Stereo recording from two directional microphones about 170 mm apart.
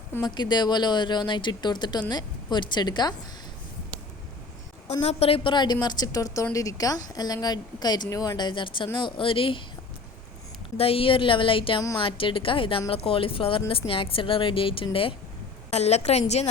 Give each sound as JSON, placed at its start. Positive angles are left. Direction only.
{"t": 0.3, "sound": "a woman's voice", "side_deg": 25}
{"t": 4.9, "sound": "a woman's voice", "side_deg": 35}
{"t": 10.8, "sound": "speech", "side_deg": 35}